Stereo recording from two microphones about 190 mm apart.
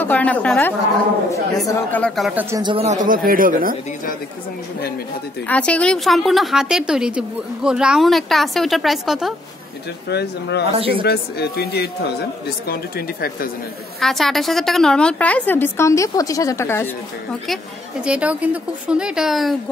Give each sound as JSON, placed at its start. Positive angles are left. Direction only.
{"t": 0.0, "sound": "a woman's voice", "side_deg": 10}
{"t": 2.5, "sound": "speech", "side_deg": -25}
{"t": 5.5, "sound": "a woman's voice", "side_deg": 5}
{"t": 10.0, "sound": "speech", "side_deg": 60}
{"t": 10.7, "sound": "speech", "side_deg": -30}
{"t": 11.1, "sound": "speech", "side_deg": 55}
{"t": 13.9, "sound": "a woman's voice", "side_deg": 0}
{"t": 18.0, "sound": "a woman's voice", "side_deg": -5}